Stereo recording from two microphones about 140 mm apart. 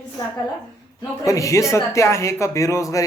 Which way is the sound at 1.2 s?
25° left (ahead or behind).